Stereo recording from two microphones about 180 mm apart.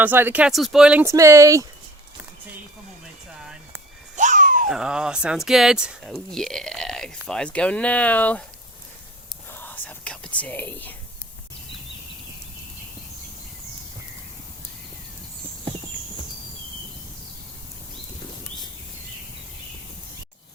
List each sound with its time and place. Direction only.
0.0 s speech: 10° right (ahead or behind)
4.2 s babbling: 45° right (ahead or behind)
4.7 s speech: 5° right (ahead or behind)
9.6 s whispering: 10° left (ahead or behind)